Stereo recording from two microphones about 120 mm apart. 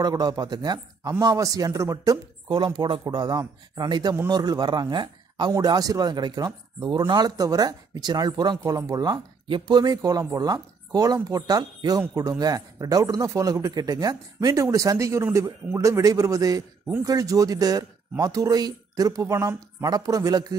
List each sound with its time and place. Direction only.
0.0 s speech: 35° right (ahead or behind)